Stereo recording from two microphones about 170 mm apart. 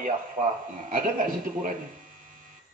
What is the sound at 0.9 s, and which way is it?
Speech, 55° right (ahead or behind).